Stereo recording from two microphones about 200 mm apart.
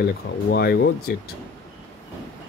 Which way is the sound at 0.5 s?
55° left (ahead or behind).